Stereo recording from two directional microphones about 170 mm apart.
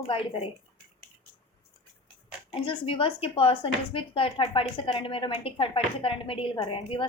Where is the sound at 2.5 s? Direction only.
30° left (ahead or behind).